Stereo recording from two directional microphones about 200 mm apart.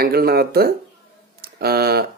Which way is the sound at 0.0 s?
50° right (ahead or behind).